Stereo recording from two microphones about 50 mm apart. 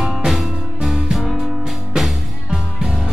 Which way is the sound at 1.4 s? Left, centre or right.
Centre.